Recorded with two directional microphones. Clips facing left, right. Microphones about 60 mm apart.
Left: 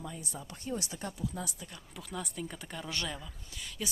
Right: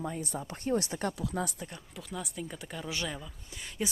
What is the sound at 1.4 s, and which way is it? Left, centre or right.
Speech, right.